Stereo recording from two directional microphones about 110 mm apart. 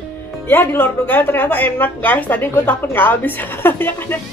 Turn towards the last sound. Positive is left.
turn(degrees=20)  # may be behind; listen again after turning